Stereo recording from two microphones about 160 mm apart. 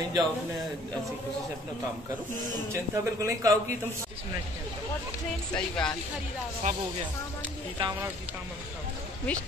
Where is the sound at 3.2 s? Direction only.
20° right (ahead or behind).